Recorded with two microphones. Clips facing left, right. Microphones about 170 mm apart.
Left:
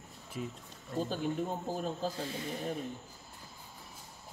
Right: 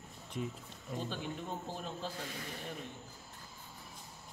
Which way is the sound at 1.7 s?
40° left (ahead or behind).